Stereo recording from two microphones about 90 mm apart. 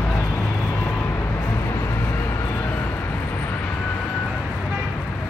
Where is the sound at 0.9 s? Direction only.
25° left (ahead or behind).